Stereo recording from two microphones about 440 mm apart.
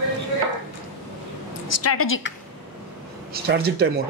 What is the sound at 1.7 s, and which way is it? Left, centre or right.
Speech, left.